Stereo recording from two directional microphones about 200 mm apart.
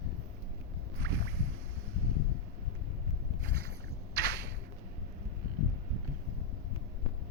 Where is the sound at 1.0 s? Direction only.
55° right (ahead or behind).